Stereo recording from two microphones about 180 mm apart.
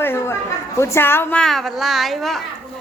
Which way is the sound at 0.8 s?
15° left (ahead or behind).